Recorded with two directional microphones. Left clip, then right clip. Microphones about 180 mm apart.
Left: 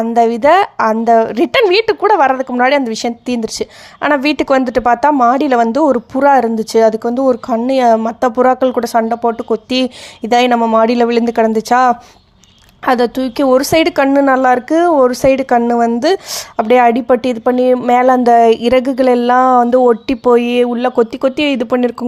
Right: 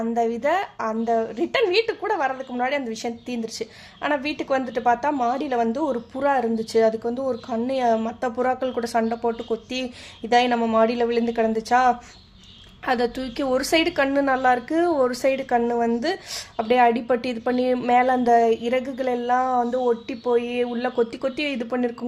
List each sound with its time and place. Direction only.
0.0 s a woman's voice: 45° left (ahead or behind)